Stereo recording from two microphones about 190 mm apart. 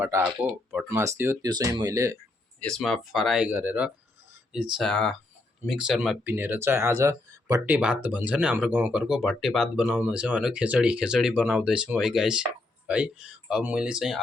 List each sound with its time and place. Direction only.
0.0 s speech: 10° right (ahead or behind)
2.6 s speech: 5° left (ahead or behind)